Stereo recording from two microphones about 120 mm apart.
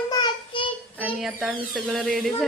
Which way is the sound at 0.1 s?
40° left (ahead or behind).